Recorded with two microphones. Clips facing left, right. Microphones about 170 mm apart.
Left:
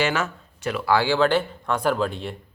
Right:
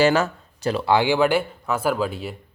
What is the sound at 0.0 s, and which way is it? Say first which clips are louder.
Speech: right 6 dB; 35° right (ahead or behind).